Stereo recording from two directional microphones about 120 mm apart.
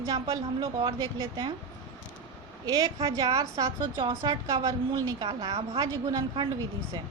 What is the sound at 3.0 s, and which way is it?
A woman's voice, 35° right (ahead or behind).